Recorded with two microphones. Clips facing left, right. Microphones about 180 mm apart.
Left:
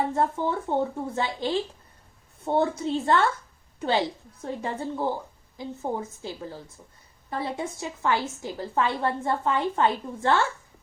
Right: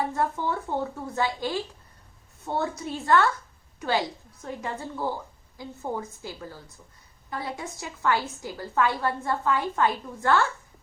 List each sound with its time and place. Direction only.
0.1 s a woman's voice: 25° left (ahead or behind)